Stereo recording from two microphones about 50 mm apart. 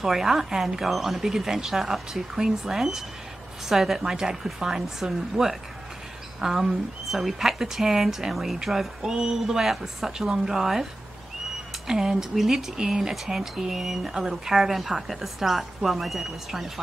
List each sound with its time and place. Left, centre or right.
0.0 s speech: centre
11.9 s speech: centre